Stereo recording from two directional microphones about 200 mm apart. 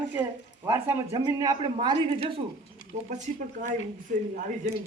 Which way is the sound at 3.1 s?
40° right (ahead or behind).